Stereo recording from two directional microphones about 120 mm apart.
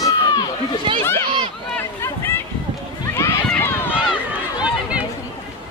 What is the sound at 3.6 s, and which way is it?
Run, 15° left (ahead or behind).